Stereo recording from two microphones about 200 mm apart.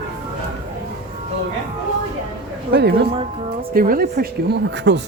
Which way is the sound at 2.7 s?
55° right (ahead or behind).